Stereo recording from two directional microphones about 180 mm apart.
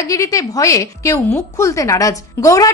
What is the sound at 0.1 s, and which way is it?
A woman's voice, 20° left (ahead or behind).